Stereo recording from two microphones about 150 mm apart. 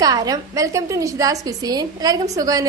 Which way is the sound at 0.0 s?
25° right (ahead or behind).